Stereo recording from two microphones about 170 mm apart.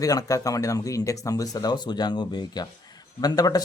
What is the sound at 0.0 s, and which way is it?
Speech, 20° left (ahead or behind).